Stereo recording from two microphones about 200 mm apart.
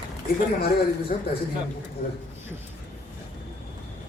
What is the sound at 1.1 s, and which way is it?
Speech, 45° left (ahead or behind).